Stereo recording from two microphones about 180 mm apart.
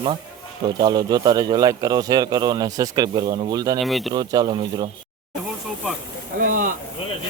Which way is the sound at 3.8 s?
Centre (ahead or behind).